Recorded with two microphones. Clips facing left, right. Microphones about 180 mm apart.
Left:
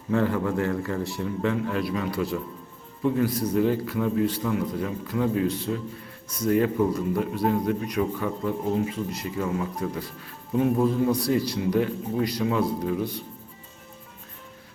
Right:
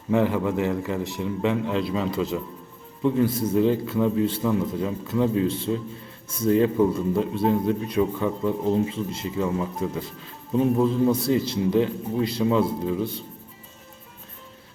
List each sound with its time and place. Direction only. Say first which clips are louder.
0.1 s a man's voice: right 2 dB; 15° right (ahead or behind)